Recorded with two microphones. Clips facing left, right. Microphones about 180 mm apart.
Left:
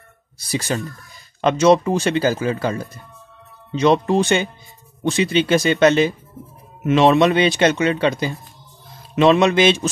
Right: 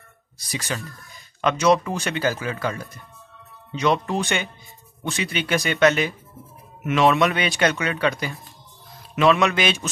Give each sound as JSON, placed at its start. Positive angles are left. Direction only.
{"t": 0.5, "sound": "speech", "side_deg": 30}